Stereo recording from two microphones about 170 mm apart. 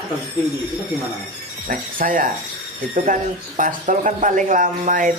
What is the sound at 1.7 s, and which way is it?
Speech, 55° right (ahead or behind).